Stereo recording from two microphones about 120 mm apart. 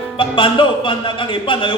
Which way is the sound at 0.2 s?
45° left (ahead or behind).